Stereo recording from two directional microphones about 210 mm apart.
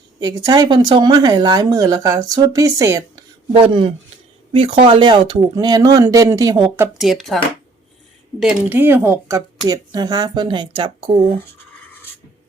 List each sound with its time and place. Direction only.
0.2 s speech: 20° right (ahead or behind)
6.7 s speech: 5° right (ahead or behind)
8.4 s speech: 5° right (ahead or behind); by 11.1 s 20° right (ahead or behind)